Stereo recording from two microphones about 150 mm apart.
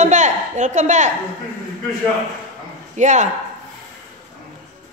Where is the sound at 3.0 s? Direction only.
50° right (ahead or behind).